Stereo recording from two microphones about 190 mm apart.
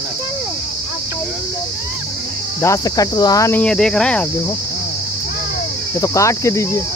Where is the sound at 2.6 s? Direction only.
15° left (ahead or behind).